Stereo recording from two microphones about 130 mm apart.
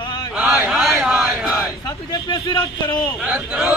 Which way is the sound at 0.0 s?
35° left (ahead or behind).